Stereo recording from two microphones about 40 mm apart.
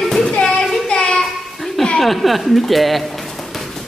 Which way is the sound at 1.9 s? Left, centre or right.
Centre.